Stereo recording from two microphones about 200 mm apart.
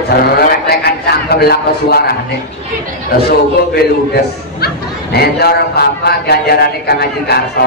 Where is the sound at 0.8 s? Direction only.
55° left (ahead or behind).